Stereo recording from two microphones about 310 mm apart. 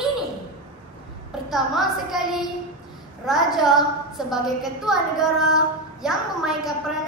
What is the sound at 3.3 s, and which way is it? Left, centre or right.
A woman's voice, centre.